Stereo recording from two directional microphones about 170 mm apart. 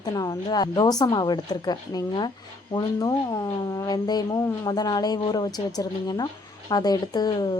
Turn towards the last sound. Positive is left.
turn(degrees=25)  # may be behind; listen again after turning